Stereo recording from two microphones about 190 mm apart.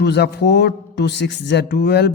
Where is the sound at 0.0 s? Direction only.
60° left (ahead or behind).